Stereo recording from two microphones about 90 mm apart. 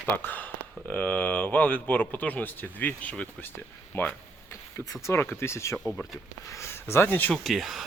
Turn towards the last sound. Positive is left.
turn(degrees=0)  # may be behind; listen again after turning